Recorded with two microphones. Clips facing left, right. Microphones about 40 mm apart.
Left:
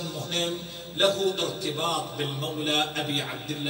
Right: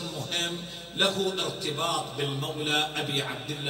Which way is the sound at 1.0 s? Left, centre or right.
Right.